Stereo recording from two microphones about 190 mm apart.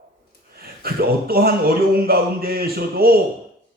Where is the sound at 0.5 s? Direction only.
55° right (ahead or behind).